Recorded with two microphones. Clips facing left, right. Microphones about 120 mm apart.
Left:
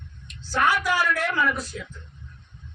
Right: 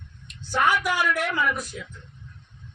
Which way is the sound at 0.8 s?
15° right (ahead or behind).